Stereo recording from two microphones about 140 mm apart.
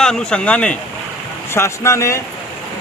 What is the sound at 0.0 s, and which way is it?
Speech, 5° left (ahead or behind).